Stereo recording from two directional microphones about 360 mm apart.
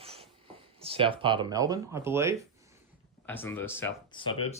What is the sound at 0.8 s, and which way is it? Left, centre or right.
Speech, centre.